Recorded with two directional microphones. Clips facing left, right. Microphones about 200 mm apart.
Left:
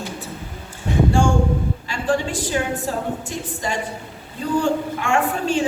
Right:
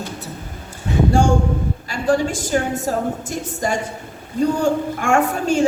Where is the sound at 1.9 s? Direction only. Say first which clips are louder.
Right 4 dB; 40° right (ahead or behind).